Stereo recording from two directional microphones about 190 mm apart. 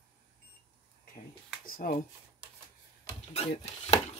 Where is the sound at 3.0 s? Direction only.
35° left (ahead or behind).